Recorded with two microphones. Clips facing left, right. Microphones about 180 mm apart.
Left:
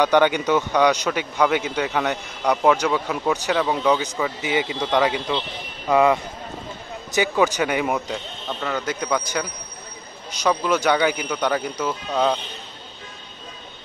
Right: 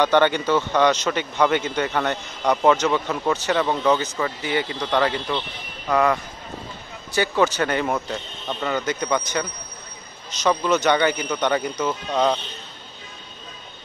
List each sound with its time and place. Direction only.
0.0 s a man's voice: 10° left (ahead or behind)
7.2 s a man's voice: 15° left (ahead or behind)